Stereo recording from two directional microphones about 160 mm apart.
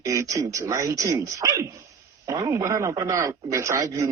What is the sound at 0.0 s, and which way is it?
Speech, 20° right (ahead or behind).